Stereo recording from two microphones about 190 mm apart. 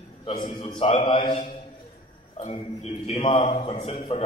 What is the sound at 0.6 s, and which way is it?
A man's voice, 30° left (ahead or behind).